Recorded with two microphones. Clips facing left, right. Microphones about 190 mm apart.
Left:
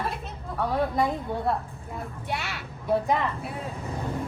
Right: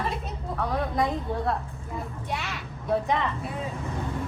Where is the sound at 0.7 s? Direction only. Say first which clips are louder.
Left 2 dB; centre (ahead or behind).